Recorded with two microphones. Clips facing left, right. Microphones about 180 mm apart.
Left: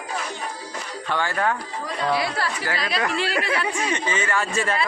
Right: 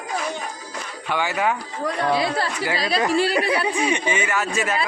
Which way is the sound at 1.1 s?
10° right (ahead or behind).